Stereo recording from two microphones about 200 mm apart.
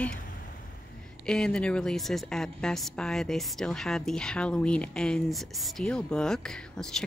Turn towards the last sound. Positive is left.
turn(degrees=5)  # may be behind; listen again after turning